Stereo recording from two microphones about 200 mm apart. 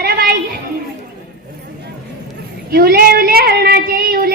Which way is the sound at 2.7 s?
50° right (ahead or behind).